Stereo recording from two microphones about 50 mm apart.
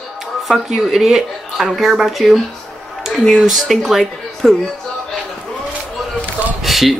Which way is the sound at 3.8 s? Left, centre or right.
Centre.